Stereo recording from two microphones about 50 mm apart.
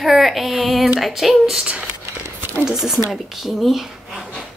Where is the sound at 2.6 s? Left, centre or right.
Centre.